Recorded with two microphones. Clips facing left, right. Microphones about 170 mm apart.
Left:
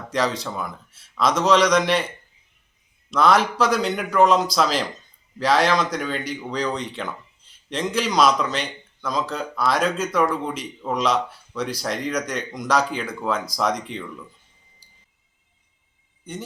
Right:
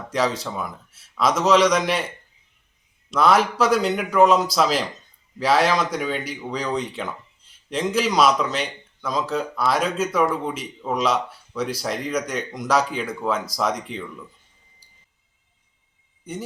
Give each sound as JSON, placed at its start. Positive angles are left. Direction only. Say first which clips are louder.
{"t": 0.1, "sound": "speech", "louder": "even", "side_deg": -5}
{"t": 3.1, "sound": "speech", "louder": "even", "side_deg": -5}